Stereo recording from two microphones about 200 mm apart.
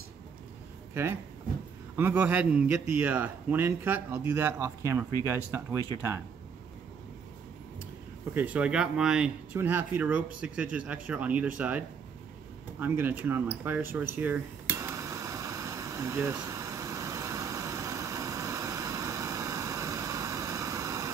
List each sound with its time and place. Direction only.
2.0 s speech: 10° right (ahead or behind)
8.4 s speech: 5° right (ahead or behind)
13.9 s a sound: 10° right (ahead or behind)